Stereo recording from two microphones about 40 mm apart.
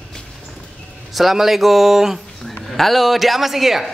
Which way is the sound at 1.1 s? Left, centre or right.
Centre.